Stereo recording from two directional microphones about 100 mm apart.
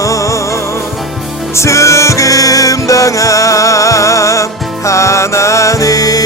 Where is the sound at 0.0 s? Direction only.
35° left (ahead or behind).